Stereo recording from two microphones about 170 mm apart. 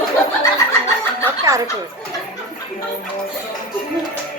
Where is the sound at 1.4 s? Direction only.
20° right (ahead or behind).